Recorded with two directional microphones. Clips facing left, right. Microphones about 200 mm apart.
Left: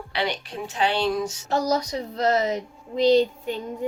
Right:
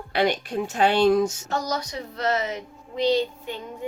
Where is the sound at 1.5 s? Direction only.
35° left (ahead or behind).